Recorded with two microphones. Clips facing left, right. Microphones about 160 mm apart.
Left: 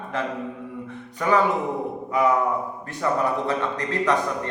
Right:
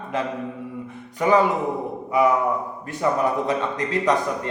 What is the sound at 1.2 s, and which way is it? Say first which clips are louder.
Speech: right 3 dB; 15° right (ahead or behind).